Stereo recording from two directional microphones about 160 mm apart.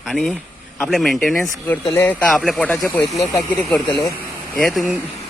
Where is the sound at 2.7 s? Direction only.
15° left (ahead or behind).